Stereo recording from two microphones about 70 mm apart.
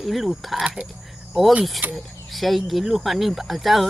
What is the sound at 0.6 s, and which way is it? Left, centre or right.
Speech, centre.